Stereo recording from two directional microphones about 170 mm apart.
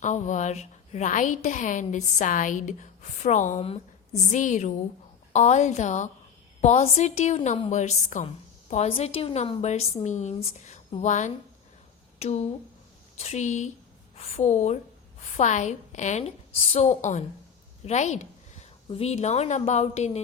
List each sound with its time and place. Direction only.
0.0 s a woman's voice: 45° left (ahead or behind)